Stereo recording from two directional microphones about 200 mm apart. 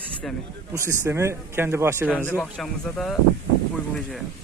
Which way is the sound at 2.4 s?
5° left (ahead or behind).